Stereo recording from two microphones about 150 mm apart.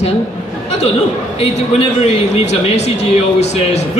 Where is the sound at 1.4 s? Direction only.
45° left (ahead or behind).